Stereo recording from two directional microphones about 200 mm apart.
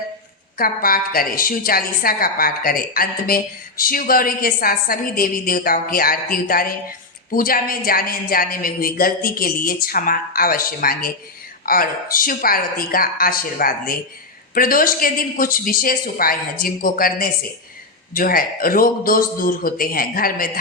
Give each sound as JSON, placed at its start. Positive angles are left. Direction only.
{"t": 0.6, "sound": "a woman's voice", "side_deg": 45}